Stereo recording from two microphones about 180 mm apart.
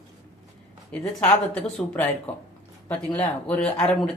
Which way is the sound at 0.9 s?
5° left (ahead or behind).